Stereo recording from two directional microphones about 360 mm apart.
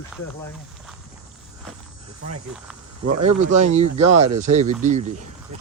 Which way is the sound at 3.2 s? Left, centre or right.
Centre.